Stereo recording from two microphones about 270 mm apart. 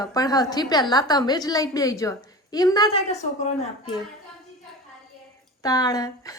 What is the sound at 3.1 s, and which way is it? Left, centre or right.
Speech, left.